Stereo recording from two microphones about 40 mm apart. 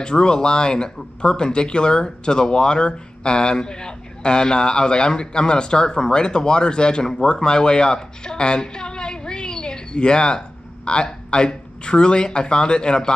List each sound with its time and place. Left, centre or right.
0.0 s a woman's voice: left